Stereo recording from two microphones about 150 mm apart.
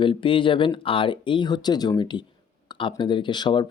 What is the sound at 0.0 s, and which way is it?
Speech, 35° left (ahead or behind).